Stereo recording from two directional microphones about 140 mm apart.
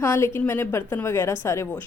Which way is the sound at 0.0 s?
15° left (ahead or behind).